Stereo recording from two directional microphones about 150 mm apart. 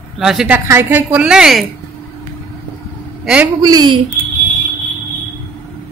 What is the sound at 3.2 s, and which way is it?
Speech, 10° right (ahead or behind).